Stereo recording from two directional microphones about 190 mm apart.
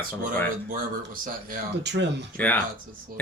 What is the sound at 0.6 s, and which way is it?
Speech, 45° right (ahead or behind).